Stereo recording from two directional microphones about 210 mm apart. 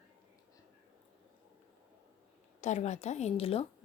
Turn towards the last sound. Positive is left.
turn(degrees=30)  # may be behind; listen again after turning